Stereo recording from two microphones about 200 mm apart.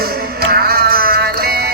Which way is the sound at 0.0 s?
50° right (ahead or behind).